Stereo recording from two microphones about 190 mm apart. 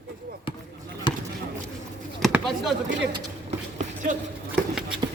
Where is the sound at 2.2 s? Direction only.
Centre (ahead or behind).